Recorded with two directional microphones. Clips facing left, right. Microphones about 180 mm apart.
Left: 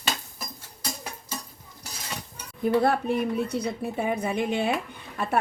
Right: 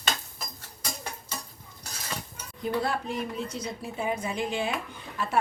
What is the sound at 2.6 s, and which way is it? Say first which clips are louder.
Speech: left 7 dB; 55° left (ahead or behind).